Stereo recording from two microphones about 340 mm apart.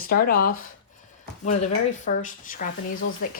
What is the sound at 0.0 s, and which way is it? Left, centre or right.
A woman's voice, left.